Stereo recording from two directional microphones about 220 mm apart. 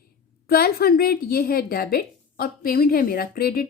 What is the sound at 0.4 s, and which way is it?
A woman's voice, 45° left (ahead or behind).